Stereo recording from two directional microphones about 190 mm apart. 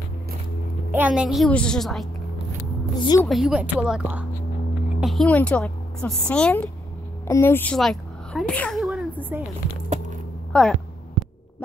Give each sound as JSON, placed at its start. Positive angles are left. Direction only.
{"t": 0.9, "sound": "a woman's voice", "side_deg": -5}
{"t": 3.0, "sound": "a woman's voice", "side_deg": 20}
{"t": 3.3, "sound": "a woman's voice", "side_deg": 0}
{"t": 10.5, "sound": "speech", "side_deg": 5}